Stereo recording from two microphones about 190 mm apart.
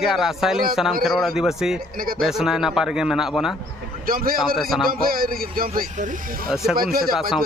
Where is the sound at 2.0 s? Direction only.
50° right (ahead or behind).